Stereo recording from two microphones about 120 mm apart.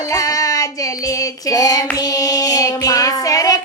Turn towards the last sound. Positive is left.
turn(degrees=30)  # may be behind; listen again after turning